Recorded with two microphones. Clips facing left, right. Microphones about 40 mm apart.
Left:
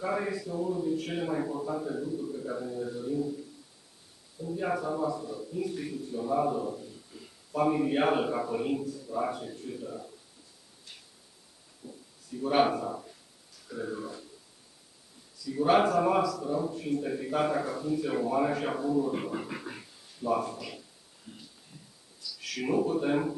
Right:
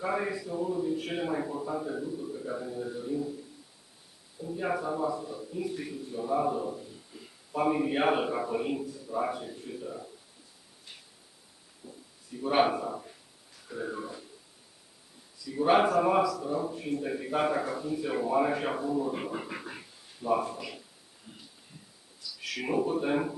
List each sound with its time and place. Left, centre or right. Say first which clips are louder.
0.0 s a man's voice: even; centre
4.4 s a man's voice: even; centre
11.8 s a sound: left 2 dB; centre
12.3 s a man's voice: even; centre
15.4 s a man's voice: even; centre
21.3 s a sound: left 2 dB; centre
22.4 s speech: left 1 dB; centre